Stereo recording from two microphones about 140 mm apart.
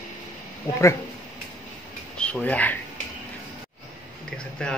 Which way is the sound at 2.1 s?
10° left (ahead or behind).